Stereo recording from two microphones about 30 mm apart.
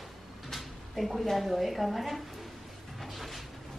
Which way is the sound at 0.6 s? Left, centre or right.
Centre.